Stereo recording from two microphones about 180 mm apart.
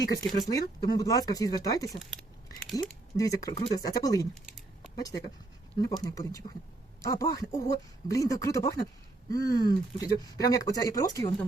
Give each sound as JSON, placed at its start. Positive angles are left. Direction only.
{"t": 0.2, "sound": "speech", "side_deg": 20}
{"t": 3.2, "sound": "speech", "side_deg": 20}